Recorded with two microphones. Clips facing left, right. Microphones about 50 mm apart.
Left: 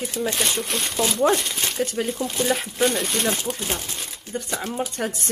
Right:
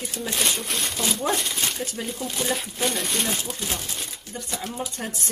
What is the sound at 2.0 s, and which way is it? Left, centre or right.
Speech, left.